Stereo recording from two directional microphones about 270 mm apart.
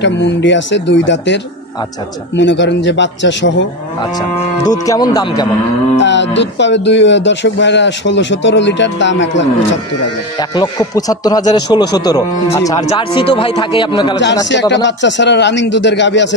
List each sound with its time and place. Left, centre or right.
0.0 s speech: left
4.6 s speech: centre
5.9 s speech: left
10.5 s speech: centre
14.9 s speech: left